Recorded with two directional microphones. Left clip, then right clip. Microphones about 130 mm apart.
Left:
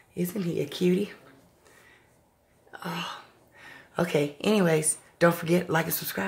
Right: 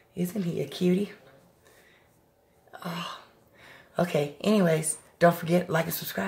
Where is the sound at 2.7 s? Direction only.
35° left (ahead or behind).